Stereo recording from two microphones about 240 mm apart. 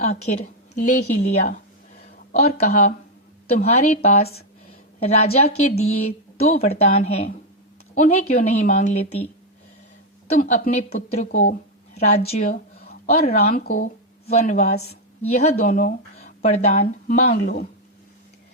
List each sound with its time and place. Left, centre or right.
0.0 s a woman's voice: left
2.4 s a woman's voice: left
10.3 s a woman's voice: left
13.1 s a woman's voice: left
13.5 s a woman's voice: left
15.6 s a woman's voice: left
16.4 s a woman's voice: left